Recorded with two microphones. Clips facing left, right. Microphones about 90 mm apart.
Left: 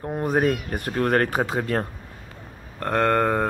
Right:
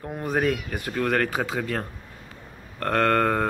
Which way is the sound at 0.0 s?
25° left (ahead or behind).